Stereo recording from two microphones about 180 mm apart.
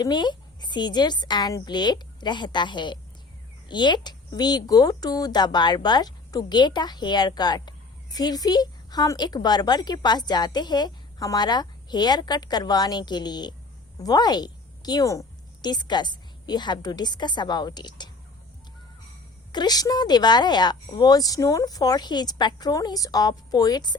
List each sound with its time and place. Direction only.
0.0 s a woman's voice: 25° left (ahead or behind)
19.5 s speech: 25° left (ahead or behind)